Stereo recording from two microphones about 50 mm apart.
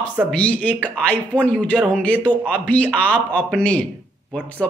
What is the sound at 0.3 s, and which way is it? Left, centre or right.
Speech, left.